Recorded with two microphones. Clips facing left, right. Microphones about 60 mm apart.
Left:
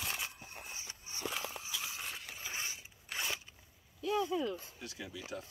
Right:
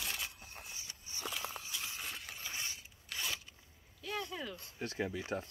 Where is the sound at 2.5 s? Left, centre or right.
Centre.